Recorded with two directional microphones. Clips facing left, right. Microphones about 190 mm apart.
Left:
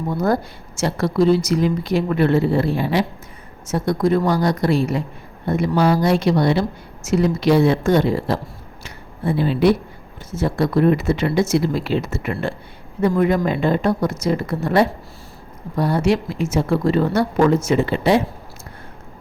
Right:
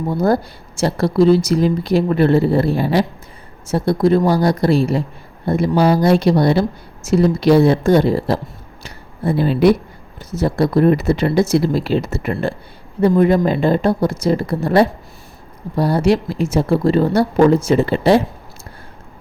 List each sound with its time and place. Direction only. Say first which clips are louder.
0.1 s speech: right 3 dB; 35° right (ahead or behind)
8.8 s a sound: right 3 dB; 40° right (ahead or behind)
10.3 s speech: right 3 dB; 35° right (ahead or behind)